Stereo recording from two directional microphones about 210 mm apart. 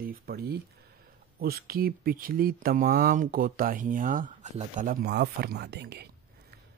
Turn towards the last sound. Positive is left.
turn(degrees=-50)  # may be behind; listen again after turning